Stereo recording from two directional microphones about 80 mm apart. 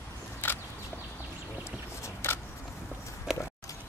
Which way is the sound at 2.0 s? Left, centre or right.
Left.